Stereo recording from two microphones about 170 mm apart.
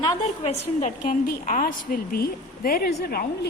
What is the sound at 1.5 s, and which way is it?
A woman's voice, 55° left (ahead or behind).